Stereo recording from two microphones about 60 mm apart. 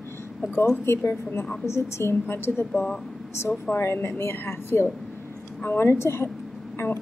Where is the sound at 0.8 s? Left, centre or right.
Left.